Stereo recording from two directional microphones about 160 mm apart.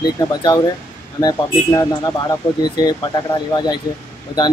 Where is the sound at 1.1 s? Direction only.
20° left (ahead or behind).